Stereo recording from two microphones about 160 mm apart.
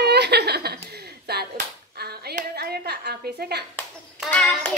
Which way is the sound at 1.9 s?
80° right.